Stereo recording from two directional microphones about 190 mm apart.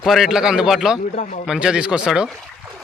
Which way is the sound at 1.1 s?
40° left (ahead or behind).